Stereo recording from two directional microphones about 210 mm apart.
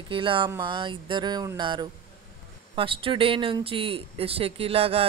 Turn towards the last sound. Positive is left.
turn(degrees=-30)  # may be behind; listen again after turning